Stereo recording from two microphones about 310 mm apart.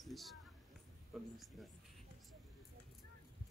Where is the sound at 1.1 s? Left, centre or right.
Centre.